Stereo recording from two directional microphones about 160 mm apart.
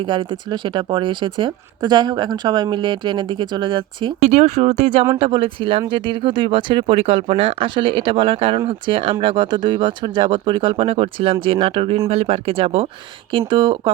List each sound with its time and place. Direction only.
0.0 s speech: 30° right (ahead or behind)
4.2 s speech: 40° right (ahead or behind)